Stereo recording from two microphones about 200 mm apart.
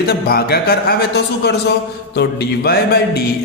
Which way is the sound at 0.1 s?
50° left (ahead or behind).